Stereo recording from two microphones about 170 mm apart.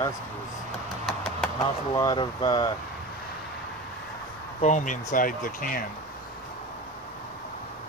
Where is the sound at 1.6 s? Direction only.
25° left (ahead or behind).